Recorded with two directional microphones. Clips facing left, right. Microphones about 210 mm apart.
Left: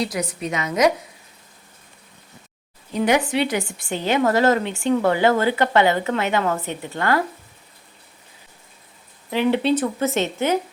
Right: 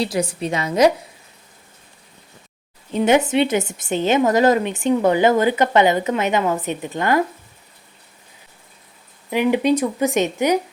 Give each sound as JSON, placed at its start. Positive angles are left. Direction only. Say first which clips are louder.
{"t": 0.0, "sound": "a woman's voice", "louder": "right 3 dB", "side_deg": -30}
{"t": 2.9, "sound": "a woman's voice", "louder": "right 3 dB", "side_deg": -25}
{"t": 9.3, "sound": "speech", "louder": "right 2 dB", "side_deg": -15}